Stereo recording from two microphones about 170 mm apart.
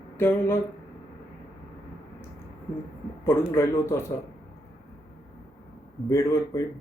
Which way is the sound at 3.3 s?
15° left (ahead or behind).